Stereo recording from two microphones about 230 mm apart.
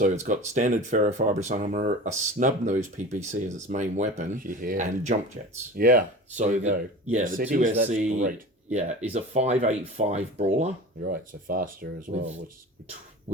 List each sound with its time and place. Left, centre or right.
0.0 s speech: right
11.0 s speech: right